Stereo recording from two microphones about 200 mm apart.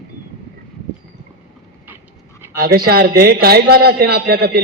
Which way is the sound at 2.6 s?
50° right (ahead or behind).